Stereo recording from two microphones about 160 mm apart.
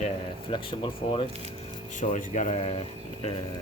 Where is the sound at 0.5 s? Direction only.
35° left (ahead or behind).